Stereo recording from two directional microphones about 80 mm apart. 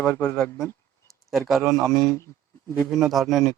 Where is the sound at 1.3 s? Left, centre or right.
Centre.